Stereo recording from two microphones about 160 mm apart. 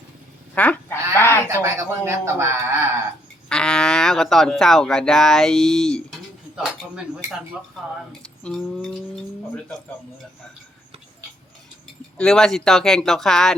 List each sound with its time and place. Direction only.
0.5 s goose: 10° left (ahead or behind)
1.1 s a sound: 15° left (ahead or behind)
1.6 s speech: 20° right (ahead or behind)
3.5 s speech: 5° left (ahead or behind)
7.8 s speech: centre (ahead or behind)
8.2 s a sound: 5° left (ahead or behind)
12.1 s speech: 5° left (ahead or behind)